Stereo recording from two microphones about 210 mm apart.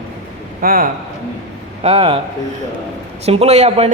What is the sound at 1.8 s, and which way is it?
Speech, 25° right (ahead or behind).